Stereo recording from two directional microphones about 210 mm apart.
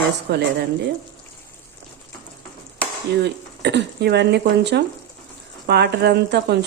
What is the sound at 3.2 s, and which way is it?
Speech, 55° right (ahead or behind).